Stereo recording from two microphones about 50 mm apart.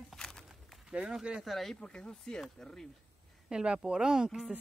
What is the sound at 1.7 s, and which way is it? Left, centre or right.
Speech, centre.